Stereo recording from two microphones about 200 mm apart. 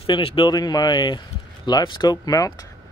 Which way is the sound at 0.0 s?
25° left (ahead or behind).